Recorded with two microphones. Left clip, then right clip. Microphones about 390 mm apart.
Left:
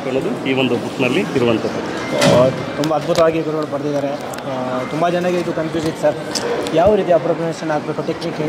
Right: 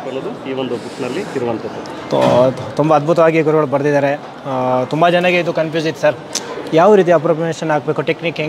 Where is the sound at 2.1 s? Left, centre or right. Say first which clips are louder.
Right 2 dB; right.